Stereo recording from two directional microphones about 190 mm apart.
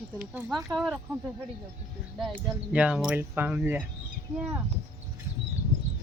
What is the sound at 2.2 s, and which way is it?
Speech, 5° right (ahead or behind).